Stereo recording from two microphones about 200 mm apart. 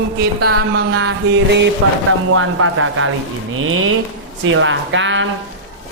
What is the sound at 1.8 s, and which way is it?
Speech, 90° right.